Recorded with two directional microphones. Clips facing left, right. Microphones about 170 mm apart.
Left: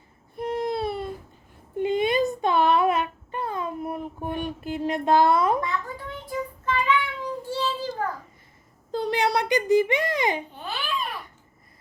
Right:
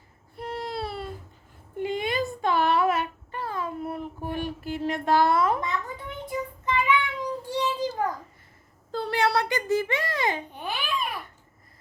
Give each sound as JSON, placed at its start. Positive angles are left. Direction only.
{"t": 0.3, "sound": "baby cry", "side_deg": 20}
{"t": 1.8, "sound": "child singing", "side_deg": 20}
{"t": 6.2, "sound": "child singing", "side_deg": -15}
{"t": 8.9, "sound": "a child's voice", "side_deg": 15}
{"t": 10.5, "sound": "babbling", "side_deg": -15}